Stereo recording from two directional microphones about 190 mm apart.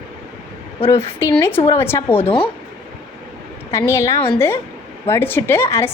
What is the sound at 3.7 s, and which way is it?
A woman's voice, 15° left (ahead or behind).